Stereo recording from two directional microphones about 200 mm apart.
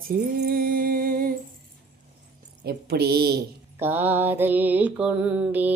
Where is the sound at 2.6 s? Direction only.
50° right (ahead or behind).